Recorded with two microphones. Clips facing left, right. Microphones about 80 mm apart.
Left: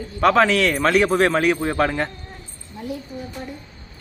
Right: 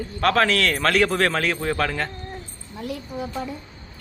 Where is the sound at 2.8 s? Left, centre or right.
Right.